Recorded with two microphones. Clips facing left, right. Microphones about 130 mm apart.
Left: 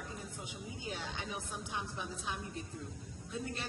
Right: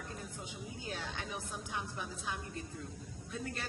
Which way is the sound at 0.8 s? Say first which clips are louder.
Even; 15° left (ahead or behind).